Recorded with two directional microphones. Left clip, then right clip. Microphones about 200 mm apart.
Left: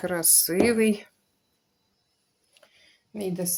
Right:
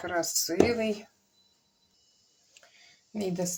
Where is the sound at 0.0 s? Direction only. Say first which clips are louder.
Left 3 dB; 45° left (ahead or behind).